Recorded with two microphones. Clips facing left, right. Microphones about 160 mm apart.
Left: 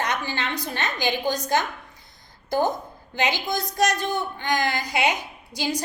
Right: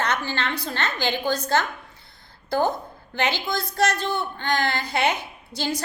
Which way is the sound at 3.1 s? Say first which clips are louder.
Even; 15° left (ahead or behind).